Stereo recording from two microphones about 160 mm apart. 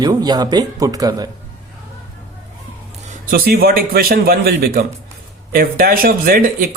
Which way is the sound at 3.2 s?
70° right (ahead or behind).